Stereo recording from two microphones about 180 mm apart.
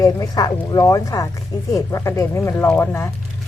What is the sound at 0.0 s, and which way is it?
Speech, 20° left (ahead or behind).